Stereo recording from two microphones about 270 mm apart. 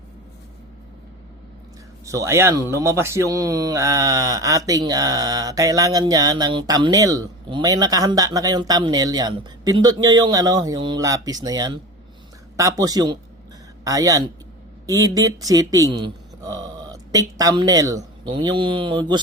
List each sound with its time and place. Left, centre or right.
2.0 s speech: centre